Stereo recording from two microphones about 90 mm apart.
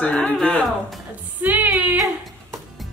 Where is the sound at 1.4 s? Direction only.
20° right (ahead or behind).